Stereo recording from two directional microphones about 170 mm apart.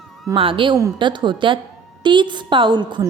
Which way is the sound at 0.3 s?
30° right (ahead or behind).